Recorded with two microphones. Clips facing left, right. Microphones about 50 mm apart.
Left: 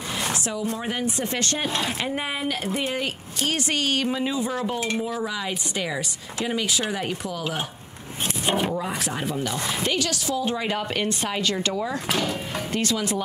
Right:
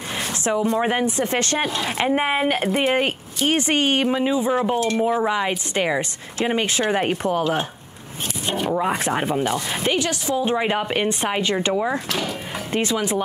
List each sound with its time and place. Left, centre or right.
0.3 s a woman's voice: right
8.5 s speech: centre
8.7 s a woman's voice: right
12.2 s music: centre
12.7 s a woman's voice: right